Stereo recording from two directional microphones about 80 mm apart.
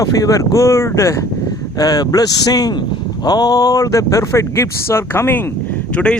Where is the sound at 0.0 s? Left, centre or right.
Left.